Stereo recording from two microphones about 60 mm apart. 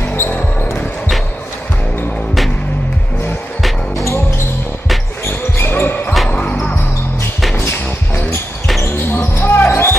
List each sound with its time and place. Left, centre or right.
0.0 s basketball bounce: left
0.3 s basketball bounce: left
3.9 s basketball bounce: left
5.2 s basketball bounce: left
8.8 s basketball bounce: left
9.7 s music: left